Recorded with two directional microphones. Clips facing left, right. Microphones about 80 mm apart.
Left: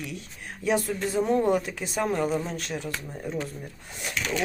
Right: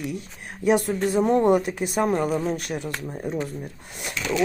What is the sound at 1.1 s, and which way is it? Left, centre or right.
Speech, right.